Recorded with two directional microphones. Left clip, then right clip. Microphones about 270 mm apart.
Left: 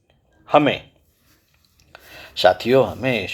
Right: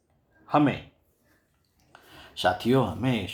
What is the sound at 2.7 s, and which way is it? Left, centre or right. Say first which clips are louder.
Speech: left 9 dB; left.